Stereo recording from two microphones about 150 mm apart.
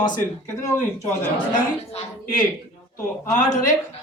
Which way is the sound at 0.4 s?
15° left (ahead or behind).